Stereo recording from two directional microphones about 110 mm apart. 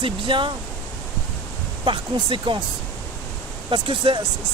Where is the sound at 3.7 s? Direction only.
50° right (ahead or behind).